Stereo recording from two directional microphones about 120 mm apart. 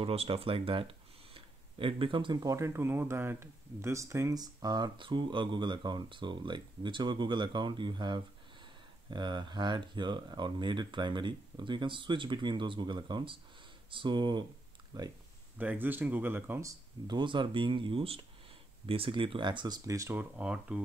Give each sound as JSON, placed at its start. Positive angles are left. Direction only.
{"t": 0.0, "sound": "speech", "side_deg": -55}
{"t": 1.3, "sound": "a sound", "side_deg": -45}
{"t": 2.4, "sound": "speech", "side_deg": -25}
{"t": 15.5, "sound": "speech", "side_deg": -15}
{"t": 17.1, "sound": "speech", "side_deg": -40}
{"t": 20.2, "sound": "speech", "side_deg": -10}